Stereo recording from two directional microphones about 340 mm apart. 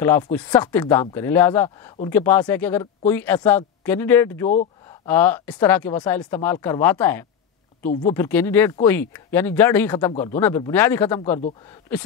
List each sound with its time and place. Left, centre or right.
0.0 s speech: centre
4.5 s a sound: centre
5.0 s speech: centre
7.8 s speech: left
8.1 s speech: centre